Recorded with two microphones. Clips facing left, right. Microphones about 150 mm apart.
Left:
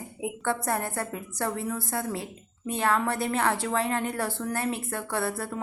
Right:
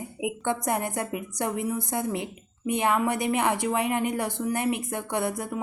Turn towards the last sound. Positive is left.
turn(degrees=-15)  # may be behind; listen again after turning